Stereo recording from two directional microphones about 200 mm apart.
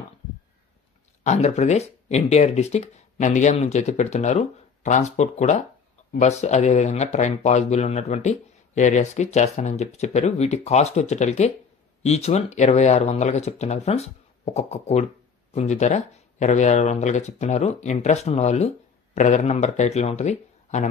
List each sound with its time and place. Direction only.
1.2 s speech: 35° left (ahead or behind)